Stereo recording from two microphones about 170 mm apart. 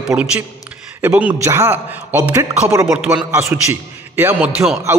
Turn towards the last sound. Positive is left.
turn(degrees=-5)  # may be behind; listen again after turning